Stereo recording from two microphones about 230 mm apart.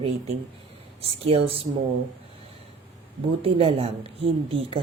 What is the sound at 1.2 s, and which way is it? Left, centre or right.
Speech, right.